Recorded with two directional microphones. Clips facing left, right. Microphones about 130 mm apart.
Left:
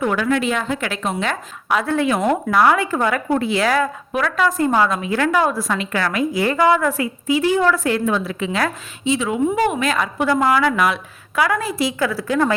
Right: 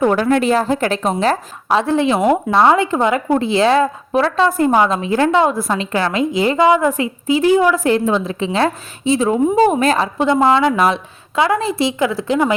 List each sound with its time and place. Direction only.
0.0 s a woman's voice: 35° right (ahead or behind); by 12.5 s 20° right (ahead or behind)